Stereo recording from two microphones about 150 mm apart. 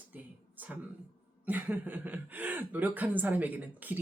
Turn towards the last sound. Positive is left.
turn(degrees=-10)  # may be behind; listen again after turning